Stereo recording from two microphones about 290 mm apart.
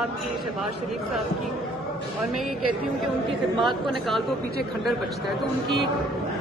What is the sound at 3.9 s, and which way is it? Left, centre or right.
Speech, centre.